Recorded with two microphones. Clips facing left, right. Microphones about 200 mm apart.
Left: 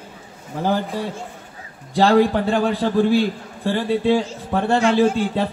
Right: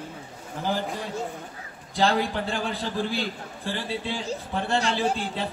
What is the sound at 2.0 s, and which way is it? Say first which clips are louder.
Speech: left 9 dB; 55° left (ahead or behind).